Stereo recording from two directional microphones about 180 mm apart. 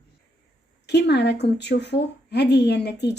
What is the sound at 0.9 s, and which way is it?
A woman's voice, 70° left (ahead or behind).